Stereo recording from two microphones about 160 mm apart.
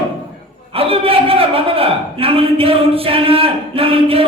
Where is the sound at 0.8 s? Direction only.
35° right (ahead or behind).